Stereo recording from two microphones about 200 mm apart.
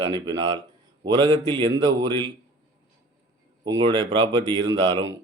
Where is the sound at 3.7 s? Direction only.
20° right (ahead or behind).